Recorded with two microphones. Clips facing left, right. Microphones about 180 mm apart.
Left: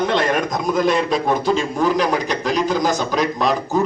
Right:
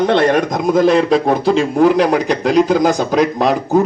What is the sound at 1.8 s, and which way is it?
Speech, 60° right (ahead or behind).